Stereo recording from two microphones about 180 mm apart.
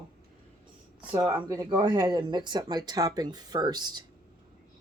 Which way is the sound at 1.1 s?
15° right (ahead or behind).